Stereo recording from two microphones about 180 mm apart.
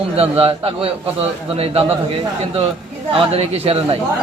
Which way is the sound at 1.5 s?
30° right (ahead or behind).